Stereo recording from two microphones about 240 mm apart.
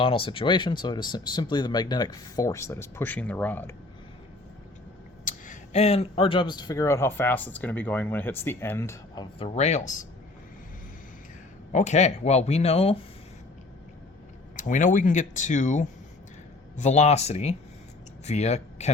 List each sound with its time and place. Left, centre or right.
0.0 s speech: left
5.2 s speech: left
11.7 s speech: left
14.5 s speech: left